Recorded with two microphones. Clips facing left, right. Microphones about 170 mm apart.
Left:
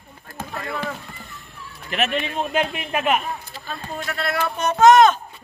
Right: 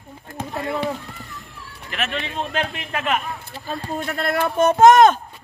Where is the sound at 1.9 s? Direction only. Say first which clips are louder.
Left 4 dB; 20° left (ahead or behind).